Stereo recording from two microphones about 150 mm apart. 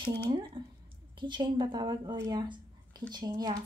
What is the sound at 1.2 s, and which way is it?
Speech, 30° right (ahead or behind).